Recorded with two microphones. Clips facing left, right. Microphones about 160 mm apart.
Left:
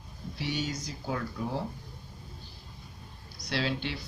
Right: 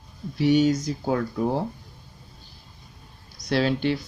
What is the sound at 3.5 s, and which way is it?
Speech, 50° right (ahead or behind).